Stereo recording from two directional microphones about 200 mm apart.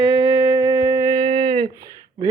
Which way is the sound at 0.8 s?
15° right (ahead or behind).